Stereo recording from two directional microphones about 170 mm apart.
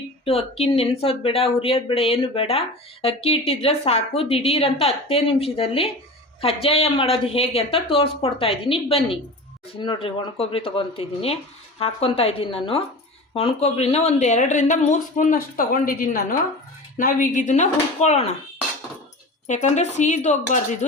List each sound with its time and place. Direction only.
0.3 s speech: 35° left (ahead or behind)
19.5 s speech: 45° left (ahead or behind)